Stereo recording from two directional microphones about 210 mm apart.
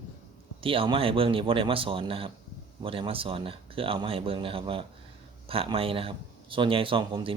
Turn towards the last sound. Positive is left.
turn(degrees=-25)  # may be behind; listen again after turning